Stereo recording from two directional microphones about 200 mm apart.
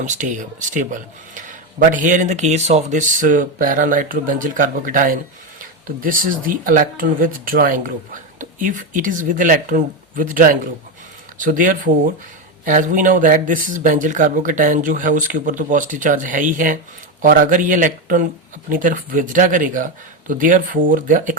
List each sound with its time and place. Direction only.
0.0 s speech: 40° right (ahead or behind)